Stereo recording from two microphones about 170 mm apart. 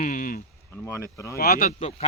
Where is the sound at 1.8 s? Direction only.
35° left (ahead or behind).